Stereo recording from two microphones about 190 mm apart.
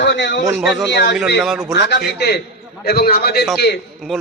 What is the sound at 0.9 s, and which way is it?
A man's voice, 65° left (ahead or behind).